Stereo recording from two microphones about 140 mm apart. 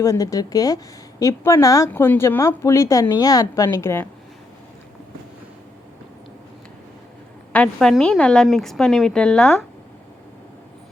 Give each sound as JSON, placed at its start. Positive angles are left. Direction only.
{"t": 0.0, "sound": "a woman's voice", "side_deg": 20}
{"t": 7.5, "sound": "a woman's voice", "side_deg": 5}